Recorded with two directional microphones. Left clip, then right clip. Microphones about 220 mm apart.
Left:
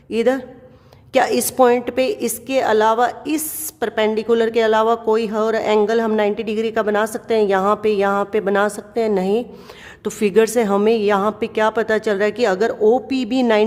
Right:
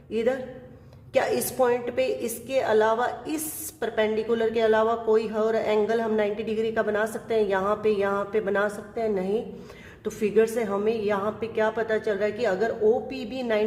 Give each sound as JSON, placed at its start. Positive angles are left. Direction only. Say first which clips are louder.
{"t": 0.1, "sound": "a woman's voice", "louder": "left 8 dB", "side_deg": 40}